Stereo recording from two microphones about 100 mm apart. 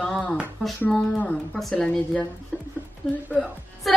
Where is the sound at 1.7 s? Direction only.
10° left (ahead or behind).